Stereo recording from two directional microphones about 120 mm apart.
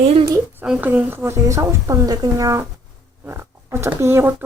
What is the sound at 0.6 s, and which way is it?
Speech, 10° right (ahead or behind).